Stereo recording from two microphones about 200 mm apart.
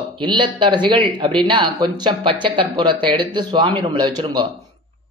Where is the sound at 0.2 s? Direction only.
25° right (ahead or behind).